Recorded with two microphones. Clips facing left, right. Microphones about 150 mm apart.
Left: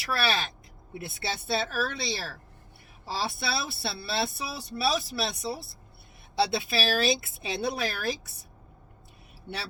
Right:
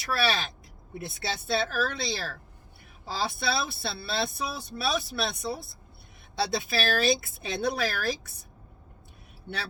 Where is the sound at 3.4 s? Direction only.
50° right (ahead or behind).